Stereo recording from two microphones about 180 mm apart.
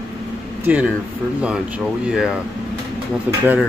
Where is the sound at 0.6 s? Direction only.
10° right (ahead or behind).